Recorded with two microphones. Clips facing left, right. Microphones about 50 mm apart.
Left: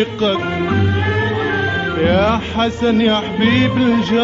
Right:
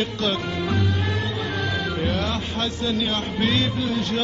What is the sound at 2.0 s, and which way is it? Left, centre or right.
Speech, left.